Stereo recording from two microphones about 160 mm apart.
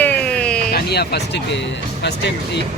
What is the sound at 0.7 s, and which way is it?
Speech, 85° left.